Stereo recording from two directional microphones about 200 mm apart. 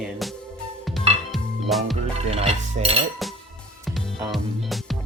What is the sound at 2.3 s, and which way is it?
Music, 30° right (ahead or behind).